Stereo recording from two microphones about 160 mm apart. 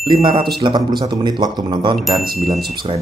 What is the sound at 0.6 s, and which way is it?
A man's voice, 25° right (ahead or behind).